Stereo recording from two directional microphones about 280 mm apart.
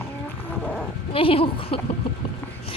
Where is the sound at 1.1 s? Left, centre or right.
Centre.